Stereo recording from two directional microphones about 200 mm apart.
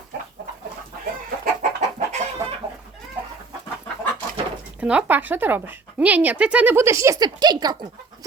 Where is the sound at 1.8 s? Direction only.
35° right (ahead or behind).